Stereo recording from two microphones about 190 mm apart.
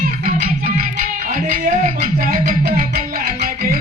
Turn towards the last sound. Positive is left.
turn(degrees=-50)  # may be behind; listen again after turning